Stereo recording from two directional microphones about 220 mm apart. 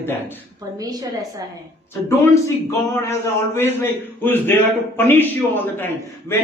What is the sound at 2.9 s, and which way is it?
A man's voice, 10° left (ahead or behind).